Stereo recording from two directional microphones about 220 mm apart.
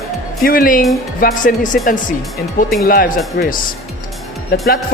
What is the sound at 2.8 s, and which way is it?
Speech, 40° left (ahead or behind).